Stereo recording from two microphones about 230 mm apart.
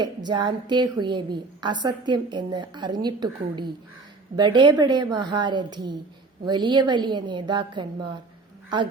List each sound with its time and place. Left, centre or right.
0.0 s a woman's voice: centre